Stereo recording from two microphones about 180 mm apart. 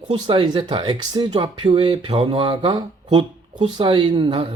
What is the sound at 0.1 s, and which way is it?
Speech, 25° right (ahead or behind).